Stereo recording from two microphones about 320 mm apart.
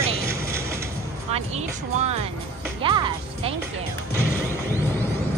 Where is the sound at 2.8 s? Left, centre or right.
Centre.